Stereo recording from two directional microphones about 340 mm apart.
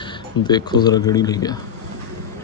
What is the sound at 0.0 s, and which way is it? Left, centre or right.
Speech, centre.